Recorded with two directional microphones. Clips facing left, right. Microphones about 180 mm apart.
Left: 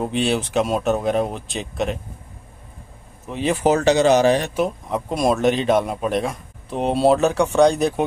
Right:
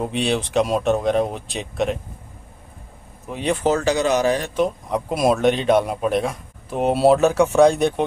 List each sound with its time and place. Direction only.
0.0 s speech: centre (ahead or behind)
3.3 s speech: centre (ahead or behind)
3.6 s speech: 20° left (ahead or behind)
4.6 s speech: centre (ahead or behind)